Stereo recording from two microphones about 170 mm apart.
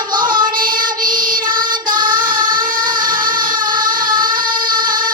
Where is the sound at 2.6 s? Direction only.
55° right (ahead or behind).